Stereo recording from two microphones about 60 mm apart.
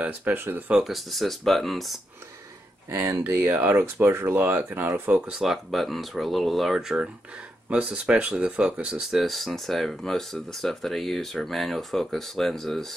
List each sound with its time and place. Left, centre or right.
0.0 s speech: right
0.8 s speech: centre
2.9 s speech: right
5.4 s speech: centre
7.7 s speech: centre
9.0 s speech: centre